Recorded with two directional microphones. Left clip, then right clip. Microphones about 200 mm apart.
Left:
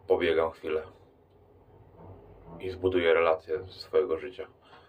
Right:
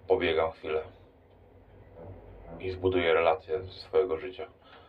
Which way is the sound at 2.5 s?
45° left (ahead or behind).